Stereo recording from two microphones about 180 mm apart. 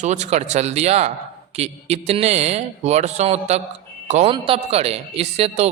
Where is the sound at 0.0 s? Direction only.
40° right (ahead or behind).